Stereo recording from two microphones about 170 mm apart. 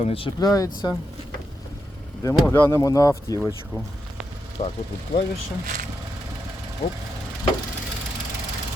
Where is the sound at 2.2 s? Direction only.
15° left (ahead or behind).